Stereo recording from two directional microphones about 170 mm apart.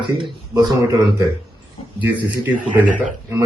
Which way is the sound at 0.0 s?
25° right (ahead or behind).